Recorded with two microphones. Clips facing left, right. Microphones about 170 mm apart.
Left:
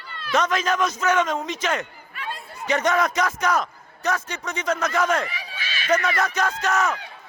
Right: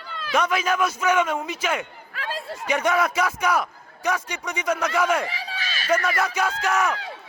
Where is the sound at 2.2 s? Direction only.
90° right.